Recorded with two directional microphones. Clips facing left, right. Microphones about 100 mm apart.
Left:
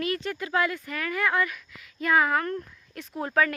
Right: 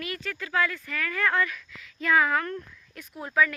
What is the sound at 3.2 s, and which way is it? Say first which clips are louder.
Speech: left 1 dB; 50° left (ahead or behind).